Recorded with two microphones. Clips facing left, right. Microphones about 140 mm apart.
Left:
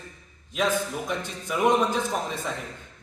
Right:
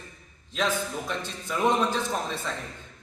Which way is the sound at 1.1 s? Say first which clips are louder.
Left 2 dB; 10° left (ahead or behind).